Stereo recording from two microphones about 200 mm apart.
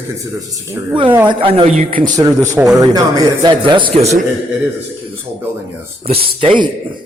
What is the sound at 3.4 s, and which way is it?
Speech, 25° right (ahead or behind).